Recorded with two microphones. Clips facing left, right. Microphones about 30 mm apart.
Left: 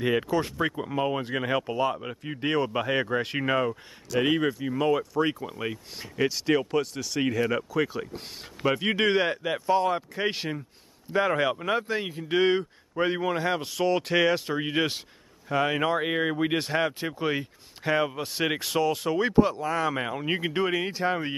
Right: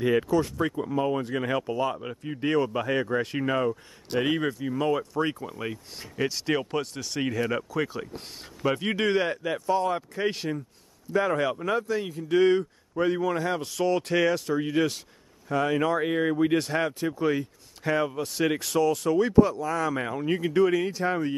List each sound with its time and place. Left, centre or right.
0.0 s speech: centre
4.2 s speech: centre
11.8 s a man's voice: left
13.4 s speech: left
14.3 s a man's voice: left